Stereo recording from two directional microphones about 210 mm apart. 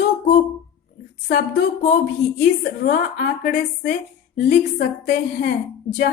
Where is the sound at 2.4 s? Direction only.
45° left (ahead or behind).